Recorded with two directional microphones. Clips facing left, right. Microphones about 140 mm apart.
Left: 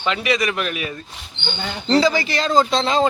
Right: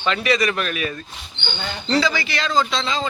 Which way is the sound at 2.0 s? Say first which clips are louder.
Left 4 dB; 35° left (ahead or behind).